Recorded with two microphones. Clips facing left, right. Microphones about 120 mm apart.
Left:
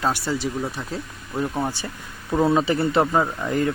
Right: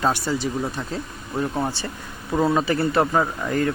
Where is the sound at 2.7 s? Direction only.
20° left (ahead or behind).